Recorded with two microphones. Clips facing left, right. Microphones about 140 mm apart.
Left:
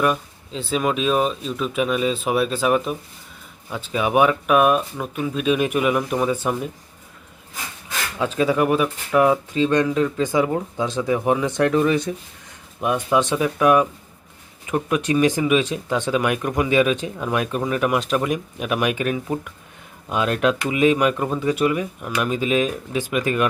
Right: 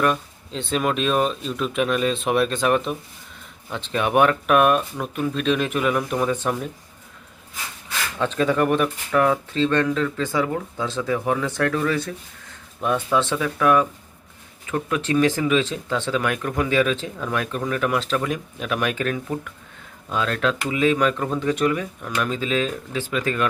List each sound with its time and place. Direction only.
0.0 s speech: 5° left (ahead or behind)
8.2 s speech: 10° left (ahead or behind)